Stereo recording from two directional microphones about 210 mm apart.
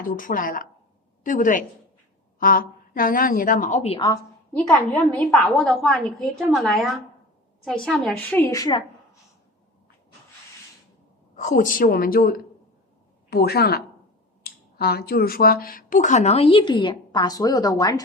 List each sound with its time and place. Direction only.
0.0 s speech: 40° left (ahead or behind); by 4.2 s 20° left (ahead or behind)
5.3 s a woman's voice: 5° left (ahead or behind)
11.3 s a woman's voice: 40° left (ahead or behind); by 18.0 s 15° left (ahead or behind)